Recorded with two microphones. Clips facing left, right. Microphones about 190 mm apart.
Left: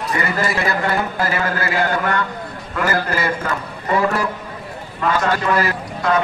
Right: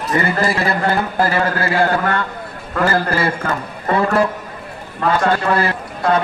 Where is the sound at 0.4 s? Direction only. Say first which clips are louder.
Right 2 dB; 30° right (ahead or behind).